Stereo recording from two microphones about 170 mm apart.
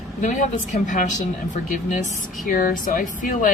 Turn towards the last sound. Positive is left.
turn(degrees=50)  # may be behind; listen again after turning